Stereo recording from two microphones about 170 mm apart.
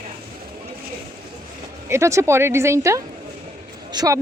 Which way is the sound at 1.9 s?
15° right (ahead or behind).